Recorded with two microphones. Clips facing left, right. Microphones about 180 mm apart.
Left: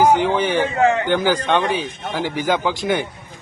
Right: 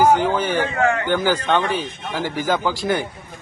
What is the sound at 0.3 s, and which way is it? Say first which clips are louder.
A man's voice: left 2 dB; 15° left (ahead or behind).